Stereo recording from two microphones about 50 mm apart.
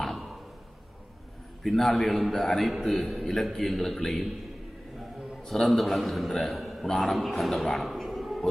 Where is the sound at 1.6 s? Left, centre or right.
Centre.